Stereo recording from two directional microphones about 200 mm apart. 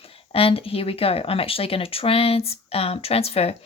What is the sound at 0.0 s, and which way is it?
A woman's voice, 30° left (ahead or behind).